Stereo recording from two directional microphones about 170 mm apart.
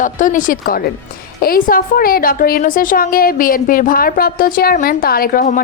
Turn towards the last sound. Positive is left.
turn(degrees=60)  # may be behind; listen again after turning